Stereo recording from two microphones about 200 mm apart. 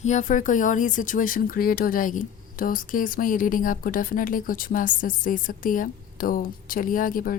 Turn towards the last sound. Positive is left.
turn(degrees=45)  # may be behind; listen again after turning